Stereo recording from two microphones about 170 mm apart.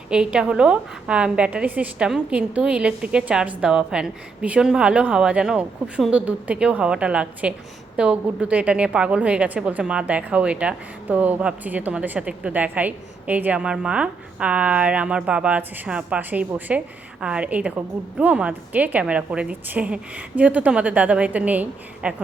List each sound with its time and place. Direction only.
0.1 s a woman's voice: 5° right (ahead or behind)